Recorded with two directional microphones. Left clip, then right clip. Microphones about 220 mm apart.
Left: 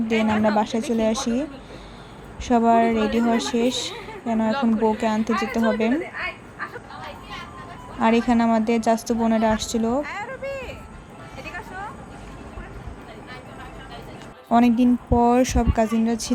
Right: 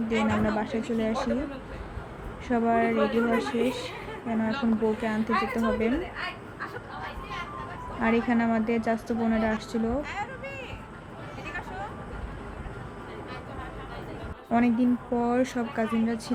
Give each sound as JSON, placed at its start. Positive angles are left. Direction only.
{"t": 0.1, "sound": "a woman's voice", "side_deg": 10}
{"t": 2.5, "sound": "a woman's voice", "side_deg": 25}
{"t": 8.0, "sound": "a woman's voice", "side_deg": 20}
{"t": 14.5, "sound": "a woman's voice", "side_deg": 25}